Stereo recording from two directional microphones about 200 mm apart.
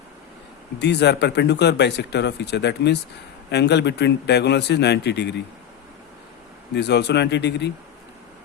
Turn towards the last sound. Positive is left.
turn(degrees=55)  # may be behind; listen again after turning